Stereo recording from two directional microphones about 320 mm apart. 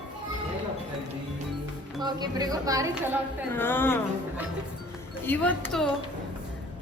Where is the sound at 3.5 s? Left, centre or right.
Centre.